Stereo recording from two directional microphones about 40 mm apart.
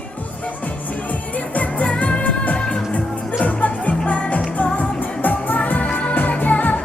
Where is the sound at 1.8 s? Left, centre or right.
Left.